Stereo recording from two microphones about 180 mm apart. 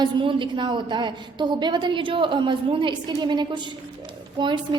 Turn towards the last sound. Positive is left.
turn(degrees=-25)  # may be behind; listen again after turning